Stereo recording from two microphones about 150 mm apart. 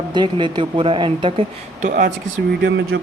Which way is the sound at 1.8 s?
60° right (ahead or behind).